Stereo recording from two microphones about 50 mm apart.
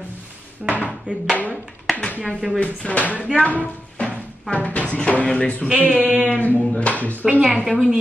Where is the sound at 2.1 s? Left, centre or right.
Left.